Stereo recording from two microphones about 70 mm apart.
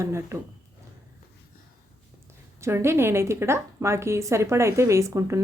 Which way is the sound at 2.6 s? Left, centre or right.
Right.